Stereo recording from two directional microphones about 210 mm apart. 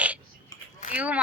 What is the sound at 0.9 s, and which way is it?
Speech, 5° right (ahead or behind).